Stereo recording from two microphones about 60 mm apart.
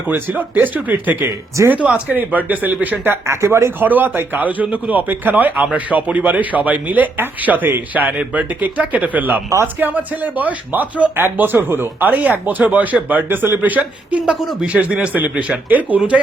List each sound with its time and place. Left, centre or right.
0.1 s speech: right
3.2 s speech: right
3.8 s speech: right